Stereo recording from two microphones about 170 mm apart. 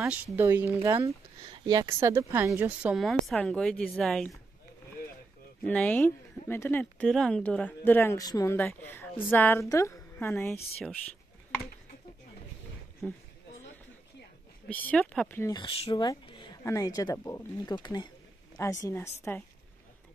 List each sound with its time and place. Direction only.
0.0 s speech: 10° right (ahead or behind)
1.4 s a woman's voice: 25° right (ahead or behind); by 4.4 s centre (ahead or behind)
5.7 s speech: 10° left (ahead or behind)
13.0 s speech: 10° left (ahead or behind)
14.7 s speech: 10° left (ahead or behind)
15.5 s speech: 30° left (ahead or behind)